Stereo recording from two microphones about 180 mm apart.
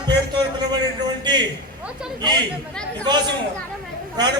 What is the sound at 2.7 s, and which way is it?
Speech, 5° left (ahead or behind).